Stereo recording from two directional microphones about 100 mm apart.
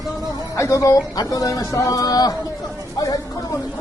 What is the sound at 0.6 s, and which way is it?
A man's voice, 30° left (ahead or behind).